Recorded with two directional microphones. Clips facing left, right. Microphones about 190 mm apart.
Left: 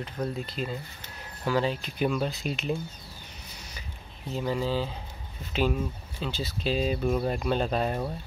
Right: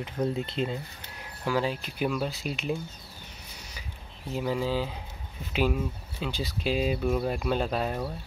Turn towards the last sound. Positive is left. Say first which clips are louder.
# left 1 dB
turn(degrees=-5)  # may be behind; listen again after turning